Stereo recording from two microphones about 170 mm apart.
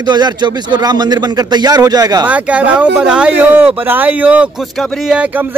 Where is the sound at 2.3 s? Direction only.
10° right (ahead or behind).